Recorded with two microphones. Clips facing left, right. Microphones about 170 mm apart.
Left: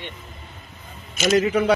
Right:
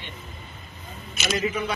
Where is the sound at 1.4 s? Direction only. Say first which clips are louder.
Left 8 dB; 75° left (ahead or behind).